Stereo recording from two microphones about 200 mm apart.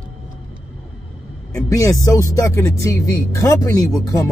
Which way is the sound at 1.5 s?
15° left (ahead or behind).